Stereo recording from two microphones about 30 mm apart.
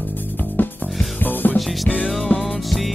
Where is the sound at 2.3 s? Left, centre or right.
Left.